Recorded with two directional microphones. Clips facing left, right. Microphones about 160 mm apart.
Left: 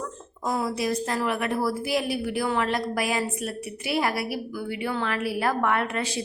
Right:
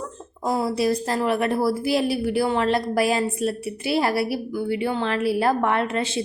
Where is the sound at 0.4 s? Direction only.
30° right (ahead or behind).